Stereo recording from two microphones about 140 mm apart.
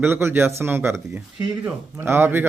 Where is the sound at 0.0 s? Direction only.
15° right (ahead or behind).